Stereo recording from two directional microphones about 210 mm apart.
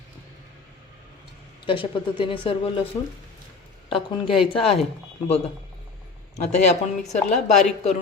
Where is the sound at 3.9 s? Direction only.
25° left (ahead or behind).